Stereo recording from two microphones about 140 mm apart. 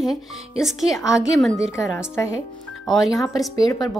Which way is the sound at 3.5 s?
25° left (ahead or behind).